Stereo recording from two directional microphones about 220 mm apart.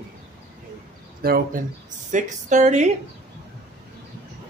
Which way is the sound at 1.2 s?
45° right (ahead or behind).